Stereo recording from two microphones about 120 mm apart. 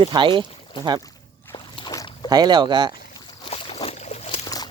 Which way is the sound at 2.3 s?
35° right (ahead or behind).